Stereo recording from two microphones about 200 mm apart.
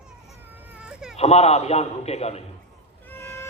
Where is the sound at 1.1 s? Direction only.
30° left (ahead or behind).